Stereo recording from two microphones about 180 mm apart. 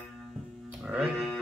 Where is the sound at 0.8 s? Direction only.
5° right (ahead or behind).